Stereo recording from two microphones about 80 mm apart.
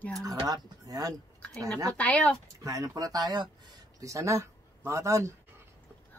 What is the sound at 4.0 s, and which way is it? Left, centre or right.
Speech, right.